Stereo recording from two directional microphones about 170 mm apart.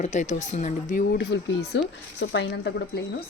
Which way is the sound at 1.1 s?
85° left.